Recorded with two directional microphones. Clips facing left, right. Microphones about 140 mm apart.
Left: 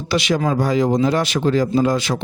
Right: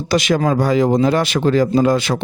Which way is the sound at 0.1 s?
50° right (ahead or behind).